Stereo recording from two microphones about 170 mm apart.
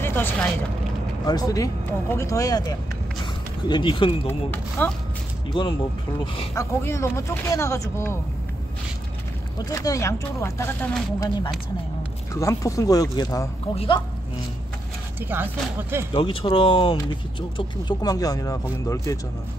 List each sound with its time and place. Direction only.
0.0 s speech: 15° left (ahead or behind); by 4.3 s 30° left (ahead or behind)
4.3 s speech: 10° left (ahead or behind)
5.5 s speech: 30° left (ahead or behind)
6.5 s speech: 15° left (ahead or behind)
9.7 s speech: 20° left (ahead or behind)
15.1 s speech: 10° right (ahead or behind)
16.1 s speech: 30° left (ahead or behind)